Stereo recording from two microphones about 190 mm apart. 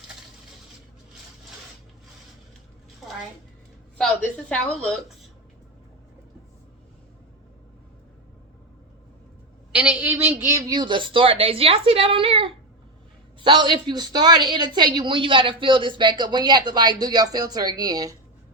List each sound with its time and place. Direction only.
3.9 s speech: 5° left (ahead or behind)
9.7 s speech: 5° right (ahead or behind)